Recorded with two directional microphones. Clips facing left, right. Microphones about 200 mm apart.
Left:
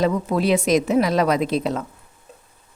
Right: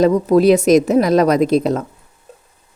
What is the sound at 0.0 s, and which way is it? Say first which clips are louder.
A woman's voice: right 8 dB; 40° right (ahead or behind).